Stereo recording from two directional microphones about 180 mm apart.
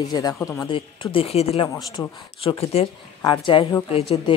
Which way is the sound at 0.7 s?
30° left (ahead or behind).